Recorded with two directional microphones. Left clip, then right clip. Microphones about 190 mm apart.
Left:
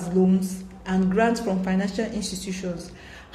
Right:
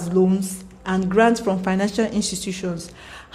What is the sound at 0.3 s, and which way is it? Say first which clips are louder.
A woman's voice: right 1 dB; 40° right (ahead or behind).